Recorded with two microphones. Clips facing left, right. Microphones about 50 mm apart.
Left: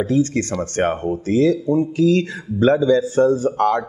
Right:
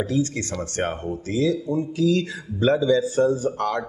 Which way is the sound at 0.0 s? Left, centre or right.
Left.